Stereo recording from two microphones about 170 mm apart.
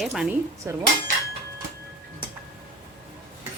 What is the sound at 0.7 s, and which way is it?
Dishes, 15° right (ahead or behind).